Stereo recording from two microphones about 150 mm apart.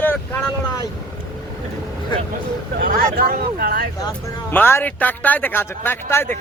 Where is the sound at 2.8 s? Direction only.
75° right (ahead or behind); by 3.8 s 90° right.